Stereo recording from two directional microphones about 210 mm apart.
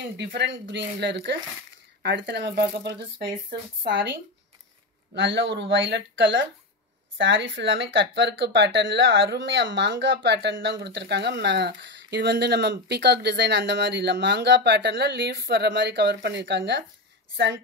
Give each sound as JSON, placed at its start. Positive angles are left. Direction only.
{"t": 0.2, "sound": "speech", "side_deg": -55}